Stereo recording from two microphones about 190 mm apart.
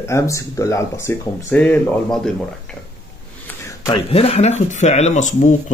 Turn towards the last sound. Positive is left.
turn(degrees=40)  # may be behind; listen again after turning